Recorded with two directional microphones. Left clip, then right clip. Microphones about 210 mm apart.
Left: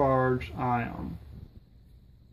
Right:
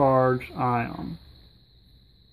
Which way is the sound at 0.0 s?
30° right (ahead or behind).